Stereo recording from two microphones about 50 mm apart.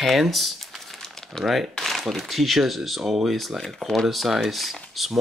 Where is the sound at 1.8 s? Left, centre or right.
Centre.